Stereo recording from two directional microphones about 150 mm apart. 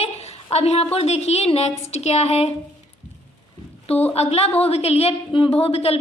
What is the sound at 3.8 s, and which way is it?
A woman's voice, 45° left (ahead or behind).